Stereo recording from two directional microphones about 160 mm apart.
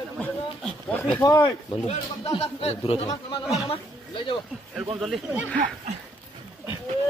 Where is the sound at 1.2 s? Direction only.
25° left (ahead or behind).